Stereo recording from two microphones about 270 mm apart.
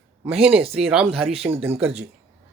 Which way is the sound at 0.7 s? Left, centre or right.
Centre.